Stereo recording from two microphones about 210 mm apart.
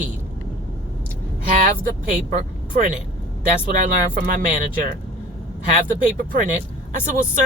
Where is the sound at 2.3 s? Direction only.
40° right (ahead or behind).